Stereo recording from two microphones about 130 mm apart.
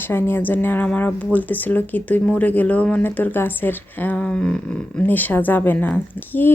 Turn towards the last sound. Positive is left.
turn(degrees=15)  # may be behind; listen again after turning